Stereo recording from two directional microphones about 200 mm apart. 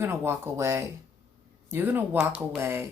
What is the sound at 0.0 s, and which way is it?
Speech, 10° right (ahead or behind).